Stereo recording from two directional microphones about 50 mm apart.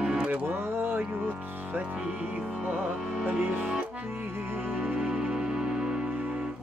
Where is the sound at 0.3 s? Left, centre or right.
Right.